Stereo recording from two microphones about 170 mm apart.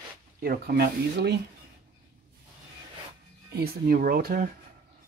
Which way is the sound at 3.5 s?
65° right (ahead or behind).